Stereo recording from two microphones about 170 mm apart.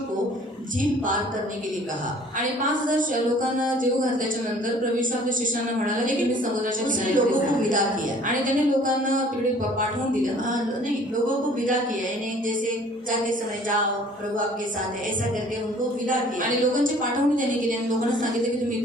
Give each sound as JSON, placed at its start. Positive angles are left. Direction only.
{"t": 2.4, "sound": "a woman's voice", "side_deg": -50}
{"t": 6.8, "sound": "a woman's voice", "side_deg": -50}
{"t": 16.0, "sound": "a woman's voice", "side_deg": -50}